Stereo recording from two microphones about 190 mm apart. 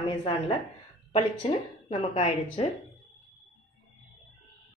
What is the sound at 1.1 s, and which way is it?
Speech, 30° left (ahead or behind).